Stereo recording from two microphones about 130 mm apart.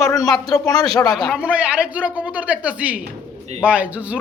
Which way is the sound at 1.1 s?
Centre (ahead or behind).